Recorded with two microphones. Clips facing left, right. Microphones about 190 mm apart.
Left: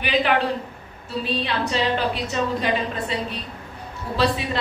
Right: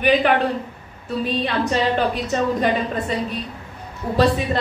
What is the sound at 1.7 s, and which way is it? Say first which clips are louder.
A woman's voice: right 2 dB; 50° right (ahead or behind).